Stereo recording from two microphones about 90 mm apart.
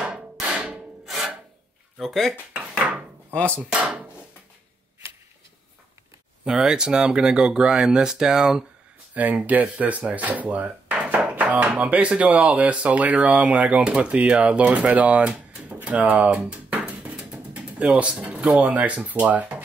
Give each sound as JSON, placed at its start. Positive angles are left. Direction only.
{"t": 0.0, "sound": "hammer", "side_deg": -10}
{"t": 1.0, "sound": "rub", "side_deg": -5}
{"t": 2.0, "sound": "speech", "side_deg": 5}
{"t": 2.3, "sound": "dishes", "side_deg": -15}
{"t": 3.7, "sound": "a sound", "side_deg": -15}
{"t": 6.4, "sound": "speech", "side_deg": -10}
{"t": 16.3, "sound": "a sound", "side_deg": -15}
{"t": 19.0, "sound": "speech", "side_deg": -15}